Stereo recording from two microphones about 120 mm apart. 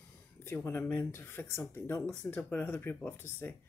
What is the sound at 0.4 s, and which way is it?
Speech, 20° left (ahead or behind).